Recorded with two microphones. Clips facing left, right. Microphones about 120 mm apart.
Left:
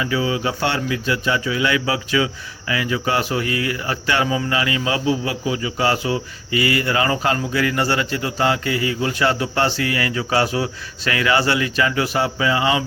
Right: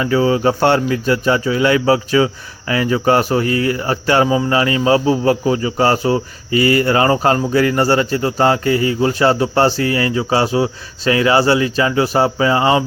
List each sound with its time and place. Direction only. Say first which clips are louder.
0.0 s speech: right 7 dB; 40° right (ahead or behind)